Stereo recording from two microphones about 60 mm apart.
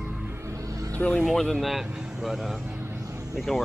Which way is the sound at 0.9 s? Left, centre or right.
Left.